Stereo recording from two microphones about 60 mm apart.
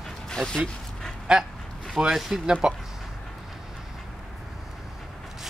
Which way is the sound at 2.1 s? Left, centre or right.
Centre.